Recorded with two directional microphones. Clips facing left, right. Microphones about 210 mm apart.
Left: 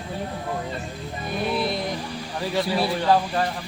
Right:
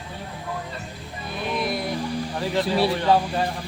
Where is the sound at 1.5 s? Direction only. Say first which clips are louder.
Even; 30° left (ahead or behind).